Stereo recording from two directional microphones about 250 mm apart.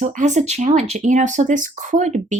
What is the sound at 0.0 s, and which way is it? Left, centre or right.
Speech, right.